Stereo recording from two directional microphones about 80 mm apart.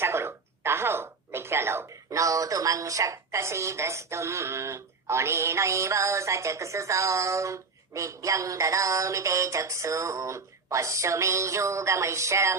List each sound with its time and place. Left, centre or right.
0.0 s a woman's voice: right